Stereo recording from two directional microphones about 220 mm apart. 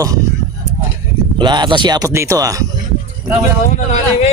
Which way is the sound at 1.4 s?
20° right (ahead or behind).